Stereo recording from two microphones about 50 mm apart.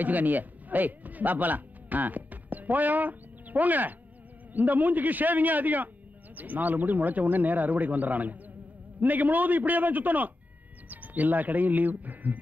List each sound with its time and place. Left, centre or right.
0.0 s speech: right